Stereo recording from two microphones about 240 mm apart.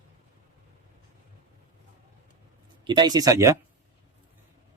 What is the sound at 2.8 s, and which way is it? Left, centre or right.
Speech, centre.